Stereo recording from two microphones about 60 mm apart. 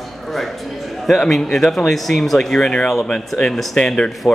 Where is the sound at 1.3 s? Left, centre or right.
Centre.